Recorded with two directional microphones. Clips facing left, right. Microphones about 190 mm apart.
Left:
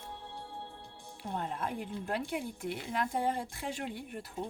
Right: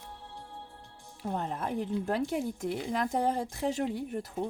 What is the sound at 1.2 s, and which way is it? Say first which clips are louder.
Speech: right 3 dB; 45° right (ahead or behind).